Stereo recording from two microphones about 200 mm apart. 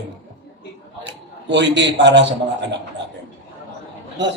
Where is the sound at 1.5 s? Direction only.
60° right (ahead or behind).